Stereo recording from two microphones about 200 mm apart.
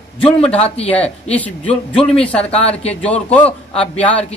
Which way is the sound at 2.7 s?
5° left (ahead or behind).